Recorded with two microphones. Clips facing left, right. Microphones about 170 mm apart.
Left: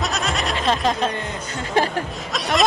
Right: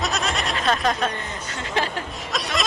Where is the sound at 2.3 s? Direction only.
Centre (ahead or behind).